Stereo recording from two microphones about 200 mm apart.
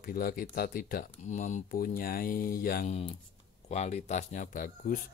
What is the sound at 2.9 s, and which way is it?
Speech, 30° left (ahead or behind).